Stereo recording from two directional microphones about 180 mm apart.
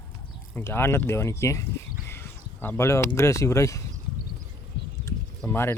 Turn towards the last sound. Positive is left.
turn(degrees=10)  # may be behind; listen again after turning